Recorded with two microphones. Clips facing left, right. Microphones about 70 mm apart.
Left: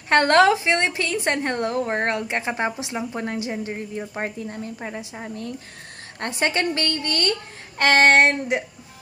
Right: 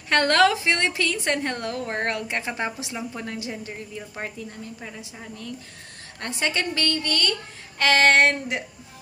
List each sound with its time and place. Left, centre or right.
0.1 s a woman's voice: left
8.2 s a woman's voice: left